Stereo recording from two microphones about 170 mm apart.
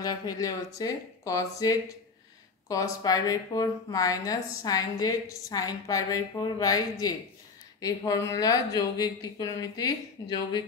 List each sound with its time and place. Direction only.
0.0 s a woman's voice: 20° left (ahead or behind)